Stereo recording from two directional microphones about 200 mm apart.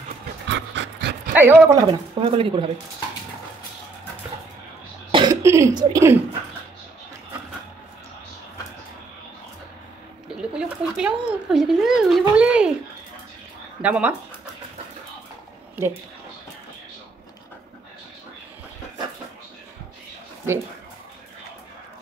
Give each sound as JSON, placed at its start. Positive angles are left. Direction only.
{"t": 0.5, "sound": "pant", "side_deg": -60}
{"t": 1.3, "sound": "speech", "side_deg": -10}
{"t": 1.9, "sound": "speech", "side_deg": -25}
{"t": 5.1, "sound": "cough", "side_deg": -20}
{"t": 10.2, "sound": "a sound", "side_deg": -5}
{"t": 13.8, "sound": "speech", "side_deg": -5}
{"t": 15.7, "sound": "speech", "side_deg": -10}